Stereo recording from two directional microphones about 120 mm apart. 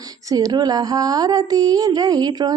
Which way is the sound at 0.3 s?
30° right (ahead or behind).